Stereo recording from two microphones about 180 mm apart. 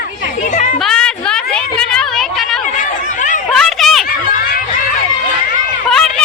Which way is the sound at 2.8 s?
45° left (ahead or behind).